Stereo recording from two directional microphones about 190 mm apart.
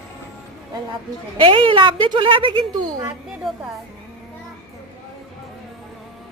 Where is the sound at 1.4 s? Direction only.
25° right (ahead or behind).